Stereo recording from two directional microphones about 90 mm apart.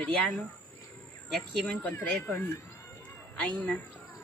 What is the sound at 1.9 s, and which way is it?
Speech, 20° left (ahead or behind).